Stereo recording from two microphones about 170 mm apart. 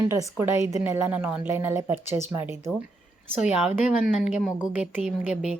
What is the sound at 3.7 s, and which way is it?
A woman's voice, 5° right (ahead or behind).